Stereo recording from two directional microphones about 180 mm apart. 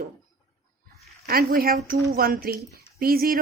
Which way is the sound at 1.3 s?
55° right (ahead or behind).